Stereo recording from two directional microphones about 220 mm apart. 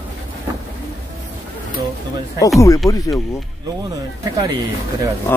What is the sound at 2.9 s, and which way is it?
Speech, 15° left (ahead or behind).